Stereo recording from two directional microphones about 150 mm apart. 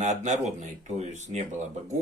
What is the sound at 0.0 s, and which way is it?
Speech, 55° right (ahead or behind).